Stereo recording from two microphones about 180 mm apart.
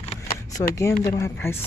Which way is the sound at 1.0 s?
20° left (ahead or behind).